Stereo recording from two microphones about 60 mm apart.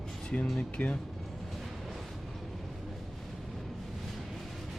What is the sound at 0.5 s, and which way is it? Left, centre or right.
Speech, left.